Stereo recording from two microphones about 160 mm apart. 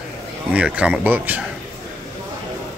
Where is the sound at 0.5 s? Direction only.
10° right (ahead or behind).